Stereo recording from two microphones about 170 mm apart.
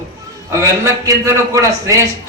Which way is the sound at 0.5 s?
20° right (ahead or behind).